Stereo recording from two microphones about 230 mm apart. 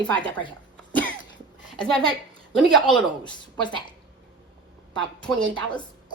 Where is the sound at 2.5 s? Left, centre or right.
Centre.